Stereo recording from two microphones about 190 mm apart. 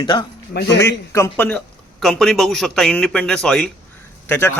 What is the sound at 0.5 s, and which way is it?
Speech, 65° left (ahead or behind).